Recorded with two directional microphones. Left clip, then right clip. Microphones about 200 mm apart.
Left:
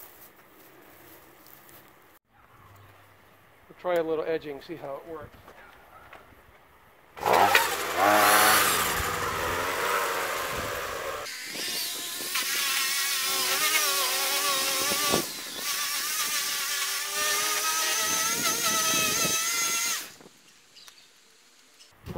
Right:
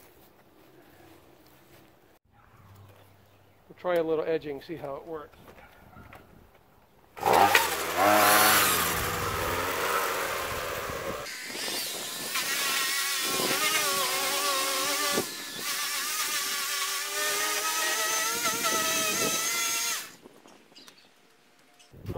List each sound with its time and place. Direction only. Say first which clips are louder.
3.8 s speech: even; 20° right (ahead or behind)
7.2 s vehicle: even; 40° right (ahead or behind)
8.2 s chainsaw: left 2 dB; 30° right (ahead or behind)
8.9 s vehicle: left 1 dB; 40° right (ahead or behind); by 20.1 s centre (ahead or behind)
22.0 s insect: right 1 dB; 10° right (ahead or behind)